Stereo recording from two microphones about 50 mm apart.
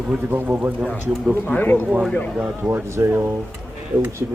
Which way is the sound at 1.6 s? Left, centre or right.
Left.